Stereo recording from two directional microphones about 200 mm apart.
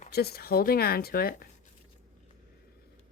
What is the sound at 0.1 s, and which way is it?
Speech, 50° left (ahead or behind).